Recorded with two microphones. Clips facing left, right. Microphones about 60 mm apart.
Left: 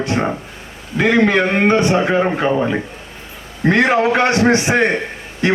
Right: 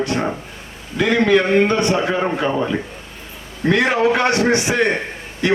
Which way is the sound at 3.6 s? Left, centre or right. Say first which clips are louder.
Left 2 dB; left.